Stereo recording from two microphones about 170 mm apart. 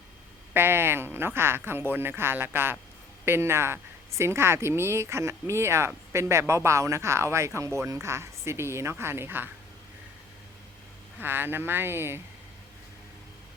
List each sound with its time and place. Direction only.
0.5 s speech: 15° right (ahead or behind)
11.2 s speech: 10° right (ahead or behind)